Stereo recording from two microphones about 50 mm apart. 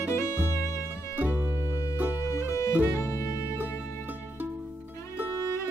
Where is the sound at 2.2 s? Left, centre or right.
Left.